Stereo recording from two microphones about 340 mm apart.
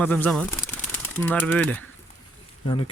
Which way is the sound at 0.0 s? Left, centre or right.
Centre.